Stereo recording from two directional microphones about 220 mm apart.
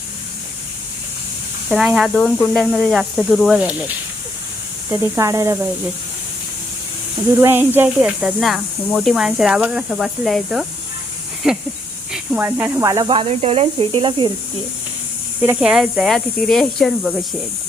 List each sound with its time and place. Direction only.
1.7 s speech: centre (ahead or behind)
4.9 s speech: 15° right (ahead or behind)
7.3 s speech: 10° right (ahead or behind)
15.4 s speech: 5° right (ahead or behind)